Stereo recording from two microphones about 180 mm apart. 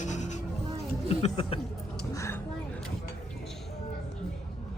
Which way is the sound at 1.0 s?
35° left (ahead or behind).